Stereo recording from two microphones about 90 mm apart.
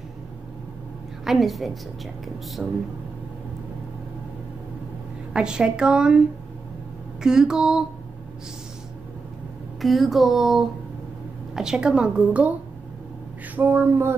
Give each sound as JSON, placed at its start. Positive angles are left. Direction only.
{"t": 1.2, "sound": "speech", "side_deg": 0}
{"t": 5.3, "sound": "a woman's voice", "side_deg": -10}
{"t": 7.2, "sound": "a woman's voice", "side_deg": -5}
{"t": 9.8, "sound": "a woman's voice", "side_deg": 0}
{"t": 13.6, "sound": "speech", "side_deg": -25}